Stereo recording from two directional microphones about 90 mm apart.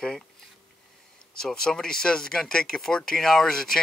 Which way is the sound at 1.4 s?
5° left (ahead or behind).